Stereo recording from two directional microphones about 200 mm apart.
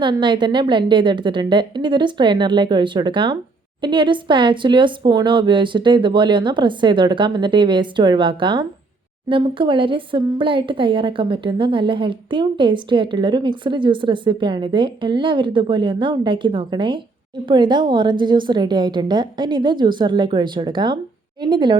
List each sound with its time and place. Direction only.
0.0 s speech: 25° right (ahead or behind)